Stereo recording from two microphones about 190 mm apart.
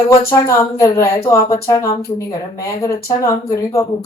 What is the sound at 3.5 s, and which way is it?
Speech, 15° left (ahead or behind).